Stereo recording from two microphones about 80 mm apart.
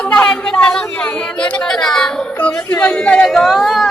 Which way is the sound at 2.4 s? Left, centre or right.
Left.